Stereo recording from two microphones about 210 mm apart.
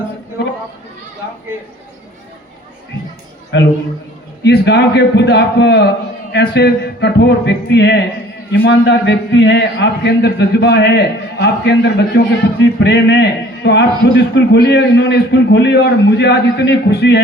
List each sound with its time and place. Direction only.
0.4 s chatter: 55° left (ahead or behind)
3.5 s a man's voice: 55° left (ahead or behind)